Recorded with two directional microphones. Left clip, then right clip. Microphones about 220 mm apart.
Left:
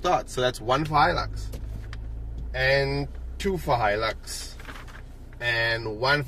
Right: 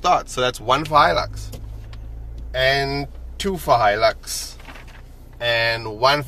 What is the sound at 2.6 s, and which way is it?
Speech, 25° right (ahead or behind).